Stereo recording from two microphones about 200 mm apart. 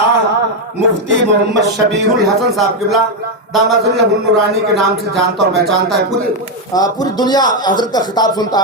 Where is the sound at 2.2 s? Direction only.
Centre (ahead or behind).